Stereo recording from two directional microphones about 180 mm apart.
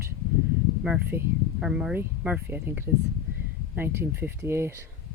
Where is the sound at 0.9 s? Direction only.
10° right (ahead or behind).